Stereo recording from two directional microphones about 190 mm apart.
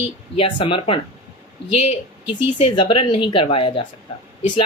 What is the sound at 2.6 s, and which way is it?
A woman's voice, 30° left (ahead or behind).